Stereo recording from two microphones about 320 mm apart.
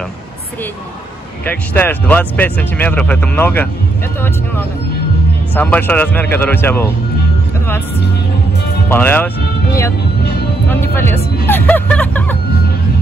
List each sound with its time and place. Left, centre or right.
1.5 s speech: centre
5.5 s speech: centre
8.9 s speech: centre
10.7 s speech: centre